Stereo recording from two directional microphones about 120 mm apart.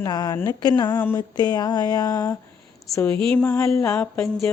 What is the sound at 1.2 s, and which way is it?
Mantra, 35° left (ahead or behind).